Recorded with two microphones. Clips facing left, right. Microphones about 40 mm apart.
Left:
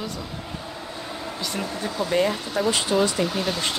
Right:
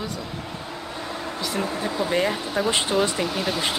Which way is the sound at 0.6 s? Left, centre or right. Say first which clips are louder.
Right 1 dB; right.